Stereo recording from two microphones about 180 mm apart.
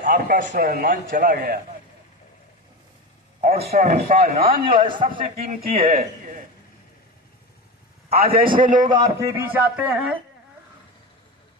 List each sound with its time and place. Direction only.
0.0 s a man's voice: 50° right (ahead or behind)
0.6 s a man's voice: 55° right (ahead or behind)
3.3 s a man's voice: 55° right (ahead or behind)
4.7 s a man's voice: 25° right (ahead or behind)
5.3 s speech: 55° right (ahead or behind)
8.2 s speech: 55° right (ahead or behind)
8.8 s speech: 20° right (ahead or behind)